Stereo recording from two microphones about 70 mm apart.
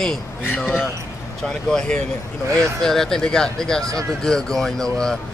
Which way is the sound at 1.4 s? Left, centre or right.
Centre.